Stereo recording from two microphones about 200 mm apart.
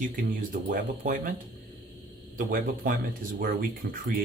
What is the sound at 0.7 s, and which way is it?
Speech, 45° right (ahead or behind).